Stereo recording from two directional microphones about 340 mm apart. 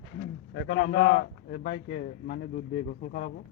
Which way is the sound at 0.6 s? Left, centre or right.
Left.